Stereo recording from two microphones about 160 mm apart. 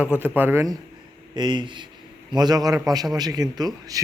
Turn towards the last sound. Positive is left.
turn(degrees=-25)  # may be behind; listen again after turning